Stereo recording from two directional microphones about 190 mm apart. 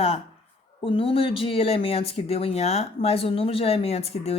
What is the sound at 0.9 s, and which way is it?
A woman's voice, 30° left (ahead or behind).